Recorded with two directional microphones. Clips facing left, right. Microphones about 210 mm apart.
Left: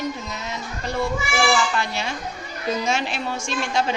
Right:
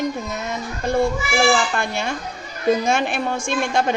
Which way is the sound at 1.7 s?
50° right (ahead or behind).